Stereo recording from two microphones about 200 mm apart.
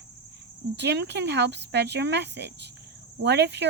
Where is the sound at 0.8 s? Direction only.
60° right (ahead or behind).